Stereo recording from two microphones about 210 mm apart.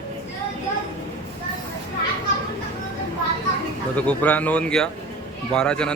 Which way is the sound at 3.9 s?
5° left (ahead or behind).